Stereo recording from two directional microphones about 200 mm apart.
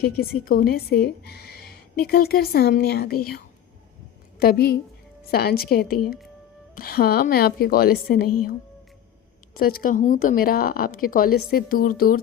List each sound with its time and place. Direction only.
0.4 s a woman's voice: 50° left (ahead or behind)
9.6 s speech: 45° left (ahead or behind)